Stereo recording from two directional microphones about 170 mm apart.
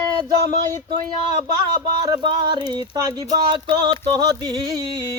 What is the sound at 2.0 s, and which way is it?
Speech, 25° right (ahead or behind).